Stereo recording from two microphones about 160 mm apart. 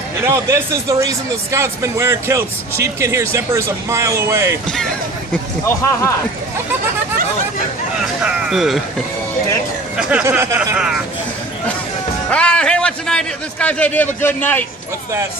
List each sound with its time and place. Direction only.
0.3 s speech: 20° right (ahead or behind)
5.3 s speech: 15° left (ahead or behind)
8.0 s speech: centre (ahead or behind)
10.0 s speech: 5° right (ahead or behind)
10.8 s a man's voice: 5° right (ahead or behind)
12.3 s a man's voice: 5° left (ahead or behind)